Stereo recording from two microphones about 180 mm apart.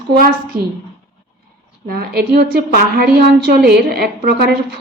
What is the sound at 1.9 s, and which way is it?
A woman's voice, 60° right (ahead or behind).